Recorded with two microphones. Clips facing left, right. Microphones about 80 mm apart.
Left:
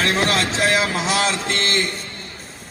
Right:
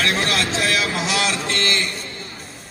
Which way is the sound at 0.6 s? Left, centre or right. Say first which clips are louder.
Left 2 dB; left.